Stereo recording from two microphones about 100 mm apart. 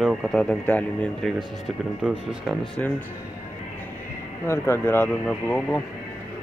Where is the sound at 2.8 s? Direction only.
15° left (ahead or behind).